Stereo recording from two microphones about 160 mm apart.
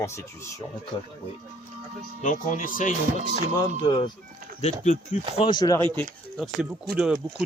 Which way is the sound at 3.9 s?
25° left (ahead or behind).